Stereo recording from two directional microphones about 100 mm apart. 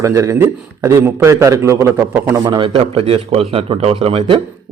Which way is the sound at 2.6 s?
70° right (ahead or behind).